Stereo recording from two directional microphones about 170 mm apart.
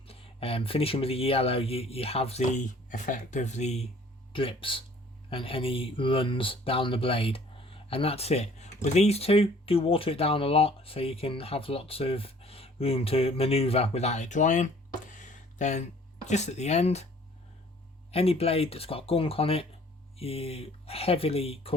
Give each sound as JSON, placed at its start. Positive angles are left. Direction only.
{"t": 0.1, "sound": "speech", "side_deg": 35}
{"t": 15.1, "sound": "a sound", "side_deg": 45}
{"t": 16.2, "sound": "speech", "side_deg": 40}
{"t": 18.1, "sound": "speech", "side_deg": 35}